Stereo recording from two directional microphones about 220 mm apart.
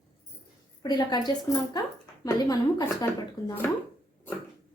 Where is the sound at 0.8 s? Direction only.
20° left (ahead or behind).